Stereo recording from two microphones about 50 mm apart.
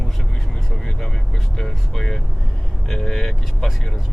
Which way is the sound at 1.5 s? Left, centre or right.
Centre.